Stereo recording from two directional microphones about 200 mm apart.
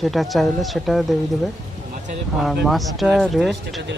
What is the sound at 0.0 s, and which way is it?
Speech, centre (ahead or behind).